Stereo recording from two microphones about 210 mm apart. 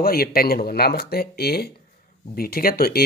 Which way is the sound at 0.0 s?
45° left (ahead or behind).